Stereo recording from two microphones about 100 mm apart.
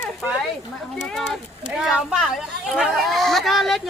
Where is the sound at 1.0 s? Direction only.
5° left (ahead or behind).